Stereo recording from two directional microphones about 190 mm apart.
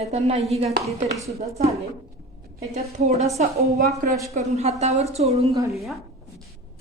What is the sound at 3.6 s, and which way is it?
Speech, 55° right (ahead or behind).